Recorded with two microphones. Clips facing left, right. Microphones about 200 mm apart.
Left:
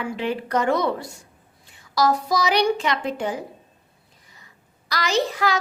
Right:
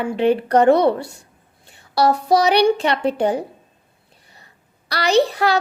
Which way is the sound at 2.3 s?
65° right (ahead or behind).